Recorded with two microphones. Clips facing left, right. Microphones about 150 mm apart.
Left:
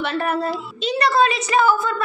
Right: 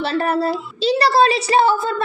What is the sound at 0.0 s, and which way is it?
A woman's voice, 35° right (ahead or behind).